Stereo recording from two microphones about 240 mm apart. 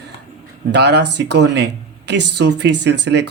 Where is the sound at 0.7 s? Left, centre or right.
Right.